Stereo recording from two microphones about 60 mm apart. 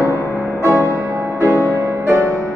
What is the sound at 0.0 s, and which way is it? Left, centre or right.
Music, right.